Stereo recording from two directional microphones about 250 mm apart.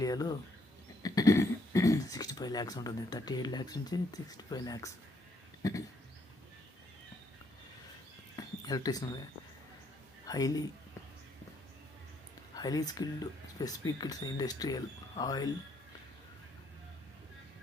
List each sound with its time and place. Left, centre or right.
0.0 s speech: centre
8.4 s speech: centre
10.2 s a man's voice: centre
12.5 s speech: centre